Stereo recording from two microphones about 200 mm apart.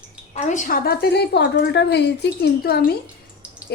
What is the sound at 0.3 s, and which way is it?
A woman's voice, 40° left (ahead or behind).